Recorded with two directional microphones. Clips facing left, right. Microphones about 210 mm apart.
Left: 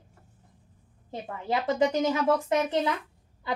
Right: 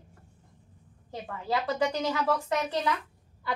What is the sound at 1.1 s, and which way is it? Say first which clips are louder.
A woman's voice: left 1 dB; 20° left (ahead or behind).